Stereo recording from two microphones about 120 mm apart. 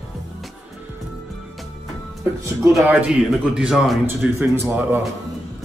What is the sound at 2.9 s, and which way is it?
A man's voice, 10° right (ahead or behind).